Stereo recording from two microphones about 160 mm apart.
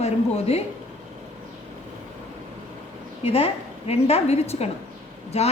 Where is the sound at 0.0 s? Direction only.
40° left (ahead or behind).